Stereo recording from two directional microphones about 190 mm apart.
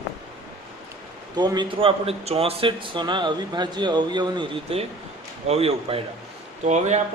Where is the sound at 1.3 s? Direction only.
20° right (ahead or behind).